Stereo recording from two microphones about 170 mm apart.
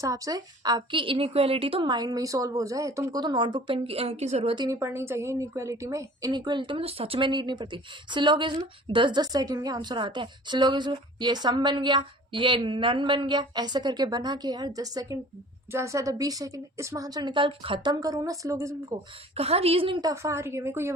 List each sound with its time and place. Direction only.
0.0 s a woman's voice: 20° right (ahead or behind); by 4.5 s 40° right (ahead or behind)
4.5 s a woman's voice: 20° right (ahead or behind)
19.4 s a woman's voice: 35° right (ahead or behind); by 20.9 s 15° right (ahead or behind)